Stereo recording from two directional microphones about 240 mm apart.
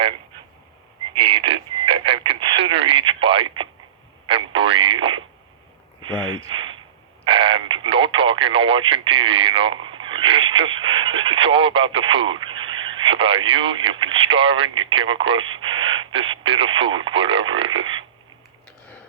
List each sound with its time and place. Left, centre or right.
1.1 s radio: right
4.3 s a sound: right
6.1 s speech: right
7.3 s a sound: right
7.8 s speech: right
10.1 s radio: right
13.0 s speech: right
17.7 s frog: centre